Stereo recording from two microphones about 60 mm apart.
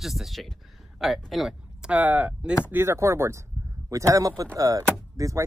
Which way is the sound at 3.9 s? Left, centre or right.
Right.